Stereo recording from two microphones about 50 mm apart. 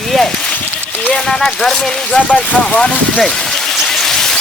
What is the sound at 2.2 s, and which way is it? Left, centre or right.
Speech, left.